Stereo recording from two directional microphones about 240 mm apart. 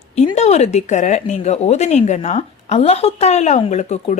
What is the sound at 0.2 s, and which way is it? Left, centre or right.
Speech, left.